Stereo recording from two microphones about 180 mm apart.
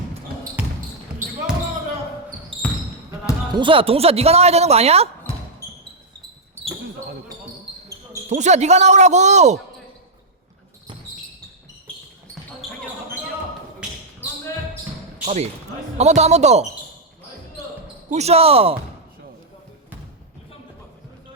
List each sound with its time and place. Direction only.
0.6 s basketball bounce: 10° right (ahead or behind)
2.5 s basketball bounce: 30° right (ahead or behind)
3.5 s speech: 30° right (ahead or behind)
5.3 s basketball bounce: 30° left (ahead or behind)
8.3 s speech: 40° right (ahead or behind)
12.6 s basketball bounce: centre (ahead or behind)
15.2 s speech: 40° right (ahead or behind)
18.1 s speech: 35° right (ahead or behind)